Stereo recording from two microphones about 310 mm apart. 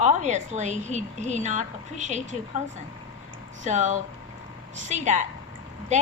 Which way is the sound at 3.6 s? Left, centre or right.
Right.